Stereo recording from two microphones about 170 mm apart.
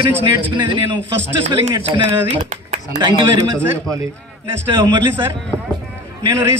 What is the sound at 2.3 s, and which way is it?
Speech, 45° right (ahead or behind).